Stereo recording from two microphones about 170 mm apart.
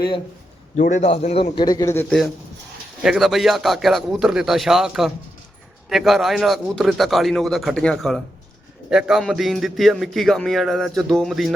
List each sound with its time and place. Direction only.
0.8 s a man's voice: 45° left (ahead or behind); by 2.0 s 20° left (ahead or behind)
2.0 s a man's voice: centre (ahead or behind)